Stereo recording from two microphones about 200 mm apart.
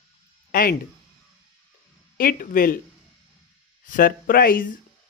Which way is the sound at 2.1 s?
45° left (ahead or behind).